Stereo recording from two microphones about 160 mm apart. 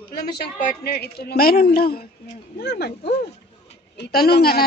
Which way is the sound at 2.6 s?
90° left.